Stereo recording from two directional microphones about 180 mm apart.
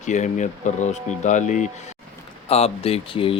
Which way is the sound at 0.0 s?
40° left (ahead or behind).